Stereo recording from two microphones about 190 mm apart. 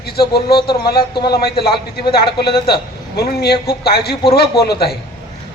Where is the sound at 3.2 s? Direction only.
55° left (ahead or behind).